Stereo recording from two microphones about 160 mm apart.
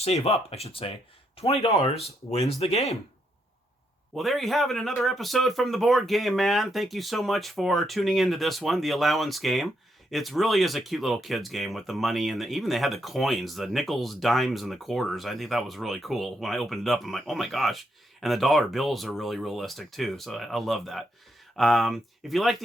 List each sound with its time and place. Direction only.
0.0 s speech: 40° left (ahead or behind)
4.1 s speech: centre (ahead or behind)